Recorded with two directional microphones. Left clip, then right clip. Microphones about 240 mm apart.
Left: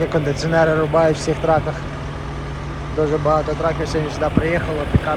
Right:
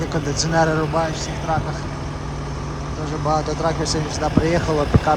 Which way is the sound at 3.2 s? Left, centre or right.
Centre.